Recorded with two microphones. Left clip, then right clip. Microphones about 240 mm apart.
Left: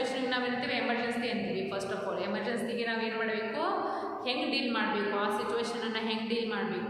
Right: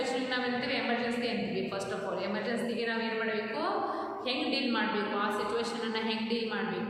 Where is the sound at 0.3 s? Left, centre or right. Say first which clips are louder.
Even; centre.